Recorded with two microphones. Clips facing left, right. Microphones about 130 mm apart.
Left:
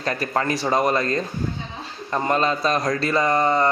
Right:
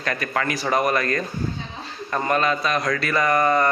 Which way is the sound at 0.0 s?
30° left (ahead or behind).